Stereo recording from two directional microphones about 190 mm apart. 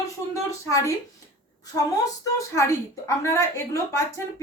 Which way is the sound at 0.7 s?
15° left (ahead or behind).